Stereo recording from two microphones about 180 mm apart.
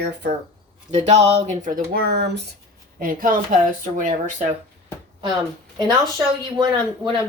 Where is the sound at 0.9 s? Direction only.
40° right (ahead or behind); by 2.4 s 65° right (ahead or behind).